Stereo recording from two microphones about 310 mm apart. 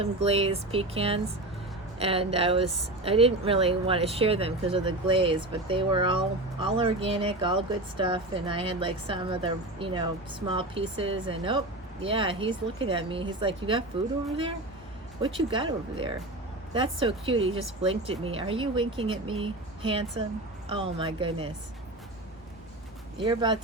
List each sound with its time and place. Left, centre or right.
0.0 s speech: centre
15.2 s speech: centre
23.2 s speech: centre